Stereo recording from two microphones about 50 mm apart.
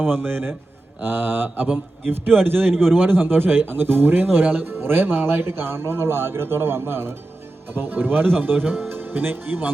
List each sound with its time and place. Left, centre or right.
0.0 s speech: right